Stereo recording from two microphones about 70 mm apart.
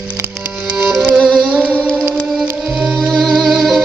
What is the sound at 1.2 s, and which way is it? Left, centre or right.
Music, centre.